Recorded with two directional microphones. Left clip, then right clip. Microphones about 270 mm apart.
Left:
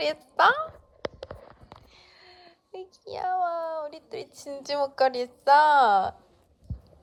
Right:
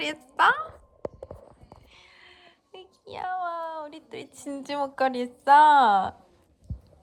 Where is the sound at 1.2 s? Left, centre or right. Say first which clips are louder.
Left 1 dB; right.